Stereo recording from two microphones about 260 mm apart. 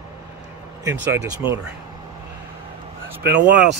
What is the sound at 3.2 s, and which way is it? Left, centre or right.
Speech, right.